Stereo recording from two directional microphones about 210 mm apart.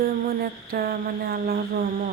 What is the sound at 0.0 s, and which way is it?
Music, 45° right (ahead or behind).